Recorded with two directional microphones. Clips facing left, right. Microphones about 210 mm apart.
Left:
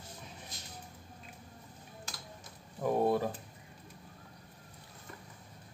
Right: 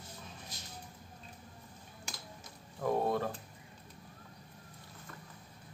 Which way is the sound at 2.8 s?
10° left (ahead or behind).